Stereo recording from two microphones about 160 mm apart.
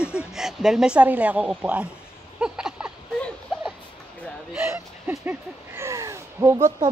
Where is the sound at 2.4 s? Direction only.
5° right (ahead or behind).